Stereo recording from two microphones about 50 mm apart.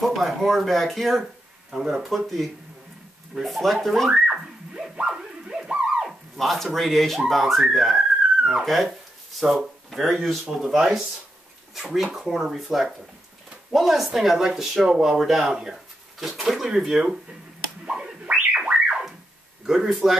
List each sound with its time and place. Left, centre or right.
0.0 s speech: centre
4.1 s theremin: centre
6.0 s speech: centre
9.4 s speech: centre
17.8 s scratching: centre
18.2 s music: right
19.6 s speech: centre